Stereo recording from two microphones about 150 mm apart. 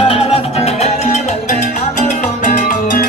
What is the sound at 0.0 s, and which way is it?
Music, 40° left (ahead or behind).